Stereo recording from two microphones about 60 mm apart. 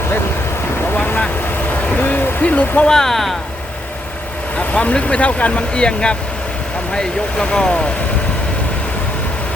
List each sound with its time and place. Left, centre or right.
0.9 s vehicle: left
2.8 s speech: centre
4.5 s speech: left